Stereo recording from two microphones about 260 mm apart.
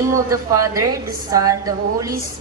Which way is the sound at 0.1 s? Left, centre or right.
Centre.